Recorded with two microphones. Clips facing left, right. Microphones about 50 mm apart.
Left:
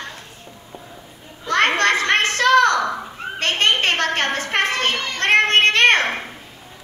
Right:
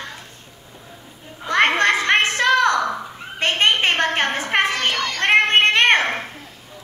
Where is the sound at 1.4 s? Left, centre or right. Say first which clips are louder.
Even; right.